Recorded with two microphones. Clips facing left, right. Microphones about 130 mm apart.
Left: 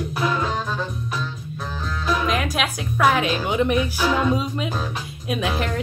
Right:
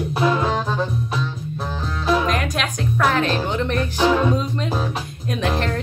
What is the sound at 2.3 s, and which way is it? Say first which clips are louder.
Music: even; 5° left (ahead or behind).